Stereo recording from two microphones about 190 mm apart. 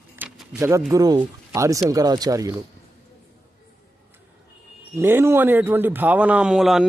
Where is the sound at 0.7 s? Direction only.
15° right (ahead or behind).